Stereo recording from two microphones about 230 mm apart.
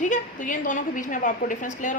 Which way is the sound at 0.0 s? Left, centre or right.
Left.